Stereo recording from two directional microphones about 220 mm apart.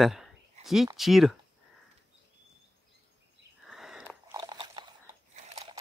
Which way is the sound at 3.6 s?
Centre (ahead or behind).